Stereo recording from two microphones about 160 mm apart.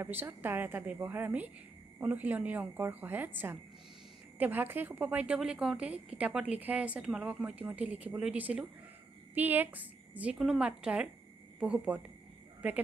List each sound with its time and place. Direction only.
0.0 s a woman's voice: 15° right (ahead or behind)